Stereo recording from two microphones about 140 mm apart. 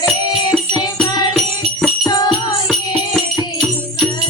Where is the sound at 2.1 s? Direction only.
30° left (ahead or behind).